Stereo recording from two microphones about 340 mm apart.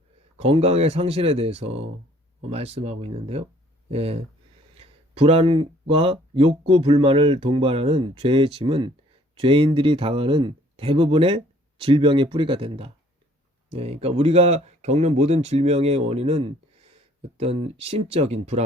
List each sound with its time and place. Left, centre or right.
0.3 s speech: centre